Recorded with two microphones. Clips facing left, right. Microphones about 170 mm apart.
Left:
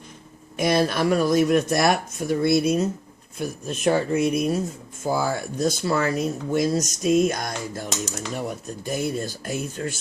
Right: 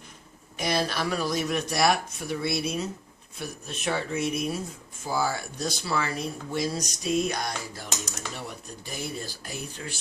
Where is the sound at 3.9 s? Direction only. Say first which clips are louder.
Left 8 dB; 50° left (ahead or behind).